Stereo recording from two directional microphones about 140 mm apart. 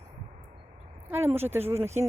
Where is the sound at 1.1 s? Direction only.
15° right (ahead or behind).